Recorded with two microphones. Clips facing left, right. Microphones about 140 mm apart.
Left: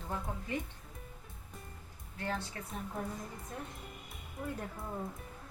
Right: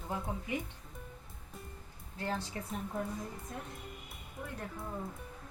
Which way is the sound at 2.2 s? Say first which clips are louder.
Right 1 dB; 30° right (ahead or behind).